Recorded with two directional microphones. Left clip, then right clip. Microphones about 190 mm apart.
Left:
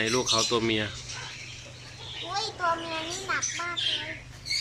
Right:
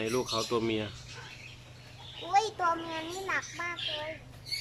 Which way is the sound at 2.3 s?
15° right (ahead or behind).